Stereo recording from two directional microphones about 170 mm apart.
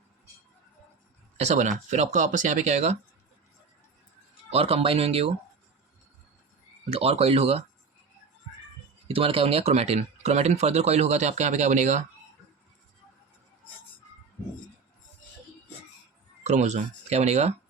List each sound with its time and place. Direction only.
1.4 s speech: 45° right (ahead or behind)
4.4 s speech: 35° right (ahead or behind)
6.9 s speech: 35° right (ahead or behind)
9.0 s speech: 35° right (ahead or behind)
16.4 s speech: 40° right (ahead or behind)